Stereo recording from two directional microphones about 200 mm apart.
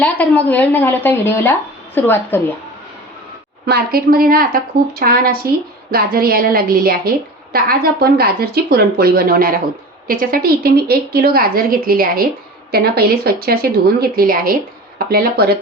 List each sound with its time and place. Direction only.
0.0 s a woman's voice: 10° left (ahead or behind)
3.7 s a woman's voice: 50° right (ahead or behind)